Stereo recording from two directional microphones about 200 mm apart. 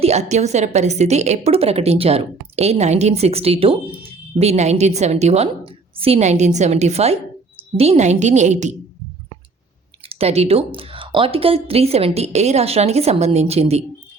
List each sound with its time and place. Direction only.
0.0 s a woman's voice: 35° right (ahead or behind)
10.1 s a woman's voice: 30° right (ahead or behind)